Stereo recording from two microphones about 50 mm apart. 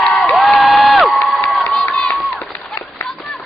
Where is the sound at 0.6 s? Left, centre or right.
Centre.